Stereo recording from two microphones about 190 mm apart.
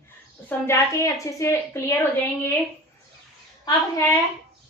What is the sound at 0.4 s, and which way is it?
A woman's voice, 15° left (ahead or behind).